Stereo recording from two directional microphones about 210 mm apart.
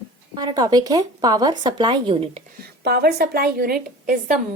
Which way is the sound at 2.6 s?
50° right (ahead or behind).